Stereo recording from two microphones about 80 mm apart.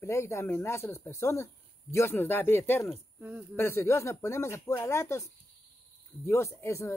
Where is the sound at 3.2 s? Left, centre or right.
Centre.